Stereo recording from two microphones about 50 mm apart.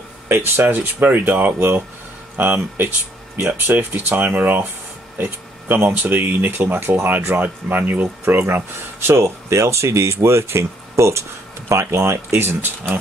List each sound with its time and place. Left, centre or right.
0.3 s speech: right
2.3 s speech: right
5.7 s speech: right
8.5 s speech: right